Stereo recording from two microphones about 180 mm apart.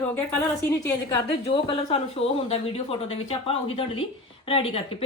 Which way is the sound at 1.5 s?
30° left (ahead or behind).